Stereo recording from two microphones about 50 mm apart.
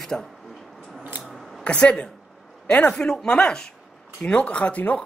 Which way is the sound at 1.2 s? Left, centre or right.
Centre.